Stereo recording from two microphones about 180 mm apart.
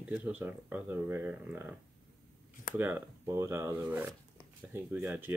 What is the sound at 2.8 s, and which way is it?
Speech, 10° right (ahead or behind).